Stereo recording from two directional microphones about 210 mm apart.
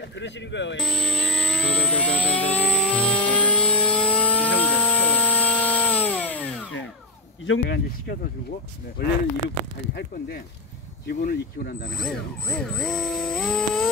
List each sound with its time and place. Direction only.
0.2 s speech: 55° left (ahead or behind)
0.8 s vehicle: 5° left (ahead or behind)
4.6 s a sound: 5° left (ahead or behind)
7.4 s speech: 55° left (ahead or behind)
9.9 s speech: 45° left (ahead or behind)
12.0 s speech: 5° left (ahead or behind)